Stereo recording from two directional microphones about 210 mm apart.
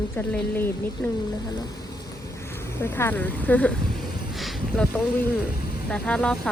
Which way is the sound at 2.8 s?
10° left (ahead or behind).